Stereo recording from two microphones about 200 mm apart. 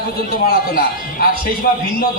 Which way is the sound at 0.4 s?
50° left (ahead or behind).